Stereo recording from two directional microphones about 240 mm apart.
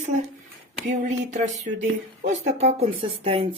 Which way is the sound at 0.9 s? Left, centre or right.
Right.